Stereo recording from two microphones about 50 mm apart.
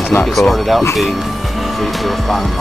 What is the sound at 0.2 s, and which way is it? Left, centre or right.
Speech, centre.